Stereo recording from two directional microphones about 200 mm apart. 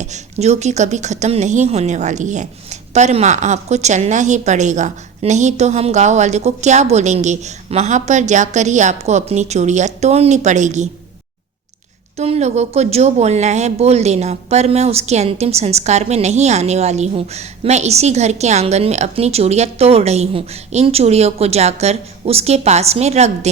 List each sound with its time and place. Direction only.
0.0 s speech: 35° right (ahead or behind)
12.1 s speech: 30° right (ahead or behind)